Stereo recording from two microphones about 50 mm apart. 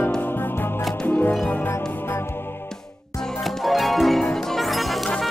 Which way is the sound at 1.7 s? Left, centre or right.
Left.